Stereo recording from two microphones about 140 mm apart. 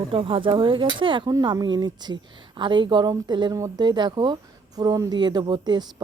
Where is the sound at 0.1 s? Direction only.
40° right (ahead or behind).